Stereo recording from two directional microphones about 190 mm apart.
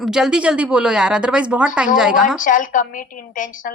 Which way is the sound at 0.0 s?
5° right (ahead or behind).